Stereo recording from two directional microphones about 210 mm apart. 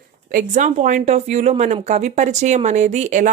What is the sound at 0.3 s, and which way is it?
Speech, 35° right (ahead or behind).